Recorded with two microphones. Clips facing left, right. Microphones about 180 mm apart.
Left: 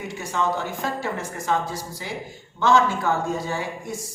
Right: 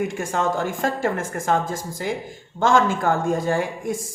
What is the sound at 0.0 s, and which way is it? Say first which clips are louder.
A woman's voice: right 3 dB; 50° right (ahead or behind).